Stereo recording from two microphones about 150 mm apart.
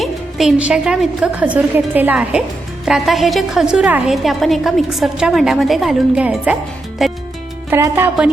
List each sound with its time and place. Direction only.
0.0 s a woman's voice: centre (ahead or behind)
7.0 s music: centre (ahead or behind)
7.7 s a woman's voice: 15° right (ahead or behind)